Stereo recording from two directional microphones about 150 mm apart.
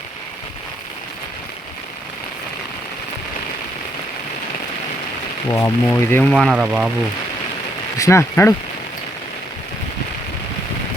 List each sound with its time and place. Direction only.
5.5 s speech: 20° left (ahead or behind)
6.3 s speech: 5° right (ahead or behind)
7.9 s speech: 20° left (ahead or behind)